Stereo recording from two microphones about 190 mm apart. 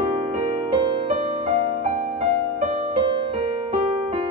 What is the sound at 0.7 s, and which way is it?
Music, 25° right (ahead or behind).